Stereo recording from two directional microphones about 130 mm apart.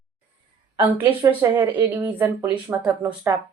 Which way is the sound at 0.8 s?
15° right (ahead or behind).